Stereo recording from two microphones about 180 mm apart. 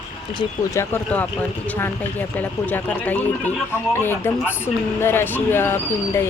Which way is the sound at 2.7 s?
10° left (ahead or behind).